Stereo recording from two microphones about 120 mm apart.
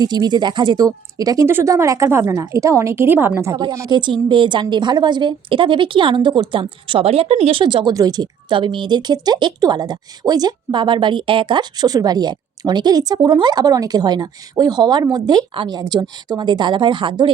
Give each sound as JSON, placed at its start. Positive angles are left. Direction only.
{"t": 0.0, "sound": "a woman's voice", "side_deg": -35}
{"t": 3.5, "sound": "a woman's voice", "side_deg": -30}
{"t": 7.6, "sound": "a woman's voice", "side_deg": -40}